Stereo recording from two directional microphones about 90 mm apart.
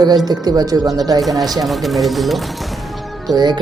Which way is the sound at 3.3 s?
50° right (ahead or behind).